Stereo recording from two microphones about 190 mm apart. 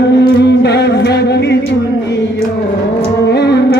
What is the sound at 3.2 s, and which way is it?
Music, 60° left (ahead or behind).